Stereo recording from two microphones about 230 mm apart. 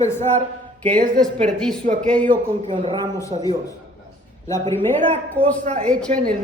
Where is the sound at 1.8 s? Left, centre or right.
Right.